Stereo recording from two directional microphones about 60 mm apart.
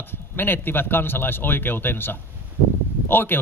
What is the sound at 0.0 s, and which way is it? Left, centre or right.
A man's voice, left.